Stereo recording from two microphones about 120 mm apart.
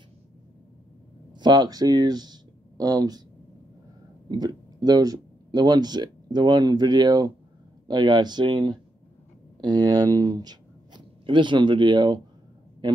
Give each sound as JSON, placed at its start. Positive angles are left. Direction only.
{"t": 1.3, "sound": "speech", "side_deg": -35}
{"t": 4.3, "sound": "speech", "side_deg": -35}